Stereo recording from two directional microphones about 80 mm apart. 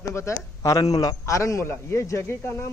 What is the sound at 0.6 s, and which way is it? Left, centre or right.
A man's voice, left.